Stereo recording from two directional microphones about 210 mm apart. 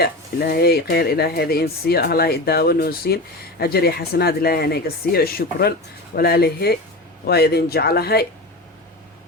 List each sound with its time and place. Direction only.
0.0 s speech: 50° left (ahead or behind)